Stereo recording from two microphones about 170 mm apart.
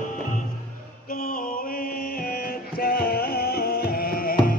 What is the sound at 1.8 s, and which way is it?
Music, 60° left (ahead or behind).